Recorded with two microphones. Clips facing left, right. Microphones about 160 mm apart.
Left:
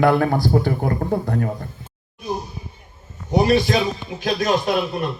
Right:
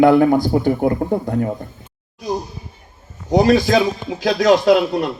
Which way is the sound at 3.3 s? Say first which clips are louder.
Right 4 dB; 90° right.